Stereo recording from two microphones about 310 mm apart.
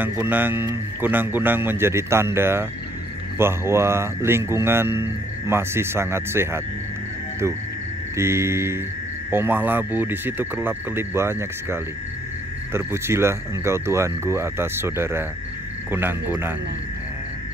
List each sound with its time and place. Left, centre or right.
0.0 s a man's voice: centre
8.2 s a man's voice: centre